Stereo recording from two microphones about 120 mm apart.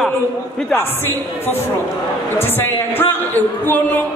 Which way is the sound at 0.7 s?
15° left (ahead or behind).